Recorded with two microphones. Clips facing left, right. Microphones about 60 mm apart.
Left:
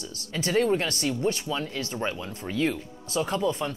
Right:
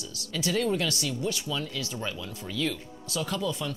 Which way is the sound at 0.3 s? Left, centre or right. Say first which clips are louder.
Left 4 dB; left.